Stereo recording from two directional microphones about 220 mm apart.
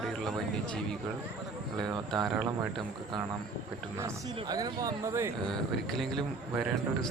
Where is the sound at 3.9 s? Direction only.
10° right (ahead or behind).